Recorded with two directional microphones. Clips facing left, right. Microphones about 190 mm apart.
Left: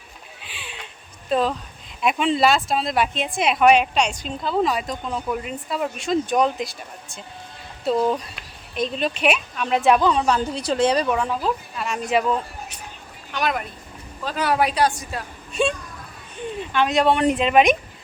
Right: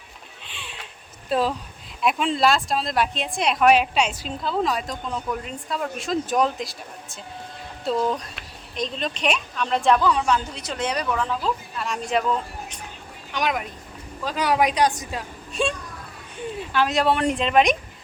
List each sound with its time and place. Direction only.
0.4 s a sound: 5° left (ahead or behind)
1.3 s a woman's voice: 5° right (ahead or behind)
10.0 s speech: 25° left (ahead or behind)
10.2 s a woman's voice: 35° left (ahead or behind)
11.1 s speech: 15° left (ahead or behind)
13.3 s speech: 10° right (ahead or behind)
15.6 s a woman's voice: centre (ahead or behind)